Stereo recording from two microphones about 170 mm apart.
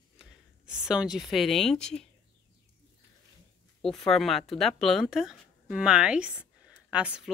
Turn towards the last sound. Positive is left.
turn(degrees=-5)  # may be behind; listen again after turning